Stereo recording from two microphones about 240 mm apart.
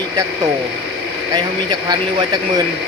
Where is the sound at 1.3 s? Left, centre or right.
Centre.